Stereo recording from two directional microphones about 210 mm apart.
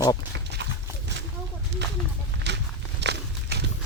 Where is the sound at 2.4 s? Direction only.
55° right (ahead or behind).